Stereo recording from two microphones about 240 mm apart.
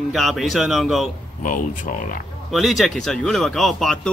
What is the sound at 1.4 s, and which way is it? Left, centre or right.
Speech, left.